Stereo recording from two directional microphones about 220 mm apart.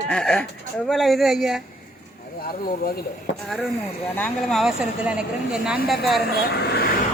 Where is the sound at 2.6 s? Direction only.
45° left (ahead or behind).